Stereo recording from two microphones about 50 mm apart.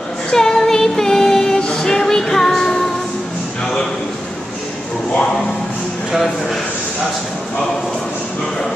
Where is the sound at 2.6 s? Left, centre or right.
Centre.